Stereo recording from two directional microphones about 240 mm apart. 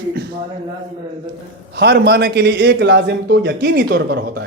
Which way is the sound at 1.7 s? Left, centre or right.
Right.